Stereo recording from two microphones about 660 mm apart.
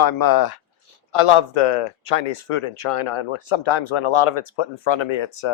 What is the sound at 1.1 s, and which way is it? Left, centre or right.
Speech, left.